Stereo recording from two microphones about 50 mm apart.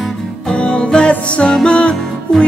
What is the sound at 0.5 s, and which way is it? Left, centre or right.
Music, centre.